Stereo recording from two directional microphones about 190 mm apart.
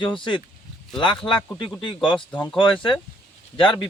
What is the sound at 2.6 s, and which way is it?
Speech, 25° left (ahead or behind).